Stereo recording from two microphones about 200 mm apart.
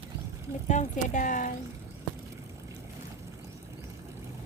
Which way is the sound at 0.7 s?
40° left (ahead or behind).